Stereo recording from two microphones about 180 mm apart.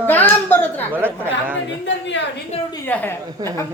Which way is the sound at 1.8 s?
85° left.